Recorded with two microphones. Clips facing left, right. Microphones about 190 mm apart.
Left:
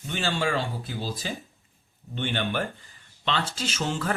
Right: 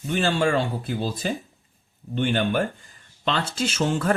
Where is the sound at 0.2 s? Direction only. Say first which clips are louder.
Right 5 dB; 55° right (ahead or behind).